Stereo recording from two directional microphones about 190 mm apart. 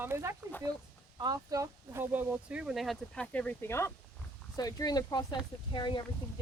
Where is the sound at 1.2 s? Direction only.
20° right (ahead or behind).